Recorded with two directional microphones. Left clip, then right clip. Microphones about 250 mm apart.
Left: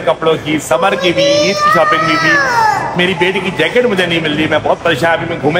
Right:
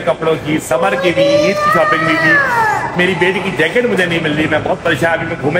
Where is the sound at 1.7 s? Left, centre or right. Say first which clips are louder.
Left 2 dB; centre.